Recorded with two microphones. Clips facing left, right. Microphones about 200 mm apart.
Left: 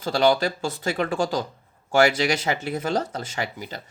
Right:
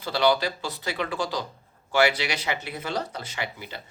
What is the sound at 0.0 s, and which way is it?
Speech, 45° left (ahead or behind).